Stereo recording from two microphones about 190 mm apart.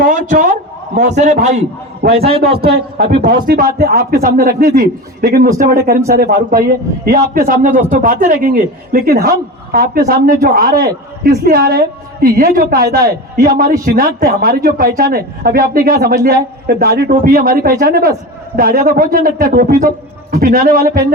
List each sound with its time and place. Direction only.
0.0 s a man's voice: 45° right (ahead or behind)
3.2 s speech: 50° right (ahead or behind)